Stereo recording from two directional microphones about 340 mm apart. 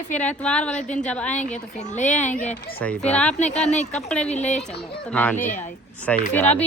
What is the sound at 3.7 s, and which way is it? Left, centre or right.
Speech, centre.